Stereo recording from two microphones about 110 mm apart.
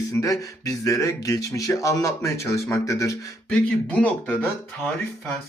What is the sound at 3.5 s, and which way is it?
Speech, 10° left (ahead or behind).